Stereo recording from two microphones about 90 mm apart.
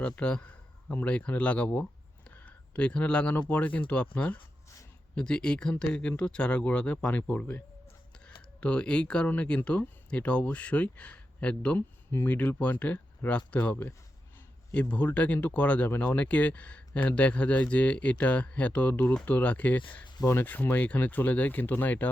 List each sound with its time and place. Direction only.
0.0 s a man's voice: 10° left (ahead or behind)
2.3 s a sound: 15° left (ahead or behind)
3.5 s speech: 15° left (ahead or behind)
8.6 s speech: 10° left (ahead or behind)